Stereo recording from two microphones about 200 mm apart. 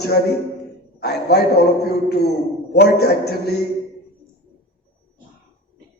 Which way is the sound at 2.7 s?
55° left (ahead or behind).